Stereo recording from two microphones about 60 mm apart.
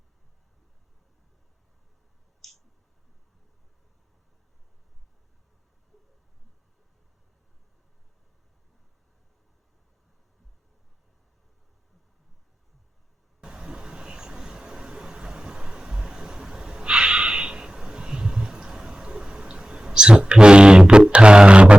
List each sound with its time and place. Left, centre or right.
2.4 s clicking: centre
13.4 s vehicle: centre
21.1 s a sound: centre